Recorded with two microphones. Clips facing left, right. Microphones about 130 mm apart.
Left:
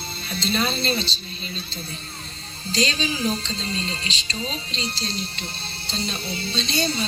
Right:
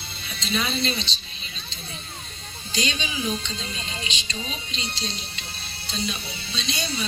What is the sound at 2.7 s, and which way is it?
Speech, 35° left (ahead or behind).